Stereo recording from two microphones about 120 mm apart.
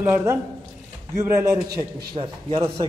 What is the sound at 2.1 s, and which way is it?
Speech, 45° right (ahead or behind).